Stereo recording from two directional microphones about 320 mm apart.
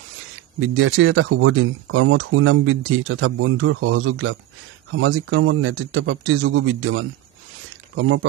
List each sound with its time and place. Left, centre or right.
0.7 s speech: right